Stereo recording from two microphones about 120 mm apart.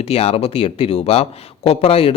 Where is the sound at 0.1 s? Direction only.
60° left (ahead or behind).